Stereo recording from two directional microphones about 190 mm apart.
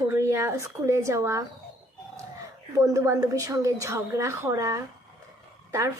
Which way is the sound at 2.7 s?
15° right (ahead or behind).